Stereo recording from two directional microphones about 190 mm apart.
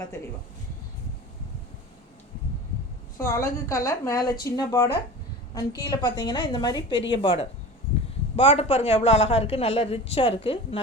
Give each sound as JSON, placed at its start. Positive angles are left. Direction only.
{"t": 3.2, "sound": "a woman's voice", "side_deg": 15}